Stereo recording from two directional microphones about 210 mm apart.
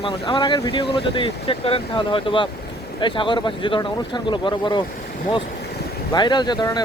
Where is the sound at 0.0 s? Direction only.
20° left (ahead or behind).